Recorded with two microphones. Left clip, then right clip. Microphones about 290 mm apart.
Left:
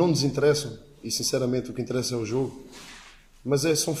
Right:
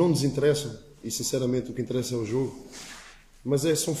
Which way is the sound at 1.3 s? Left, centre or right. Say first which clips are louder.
Right 1 dB; centre.